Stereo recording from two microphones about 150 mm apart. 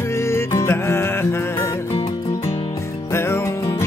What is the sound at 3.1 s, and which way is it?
Music, 15° left (ahead or behind).